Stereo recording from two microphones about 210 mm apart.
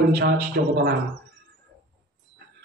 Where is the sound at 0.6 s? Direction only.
55° right (ahead or behind).